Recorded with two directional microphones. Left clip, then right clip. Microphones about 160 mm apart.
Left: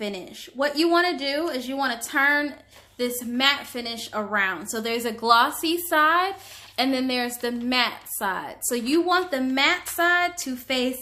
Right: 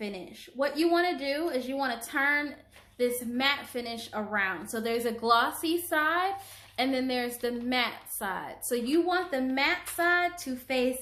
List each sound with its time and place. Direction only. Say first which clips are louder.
0.6 s a woman's voice: left 5 dB; 30° left (ahead or behind)